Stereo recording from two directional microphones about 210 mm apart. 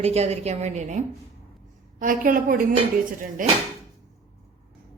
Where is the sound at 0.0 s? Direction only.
30° right (ahead or behind).